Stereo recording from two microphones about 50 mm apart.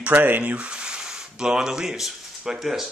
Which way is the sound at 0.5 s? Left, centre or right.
Right.